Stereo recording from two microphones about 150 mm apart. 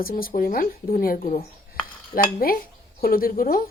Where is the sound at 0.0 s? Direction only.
75° left (ahead or behind).